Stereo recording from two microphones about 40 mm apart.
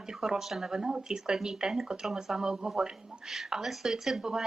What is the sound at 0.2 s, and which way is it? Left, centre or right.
Speech, centre.